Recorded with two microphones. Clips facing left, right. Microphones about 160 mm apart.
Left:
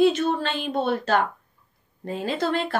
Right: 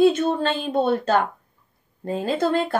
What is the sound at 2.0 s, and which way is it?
Speech, 30° right (ahead or behind).